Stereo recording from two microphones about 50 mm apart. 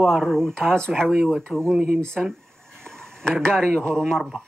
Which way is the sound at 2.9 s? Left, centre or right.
Centre.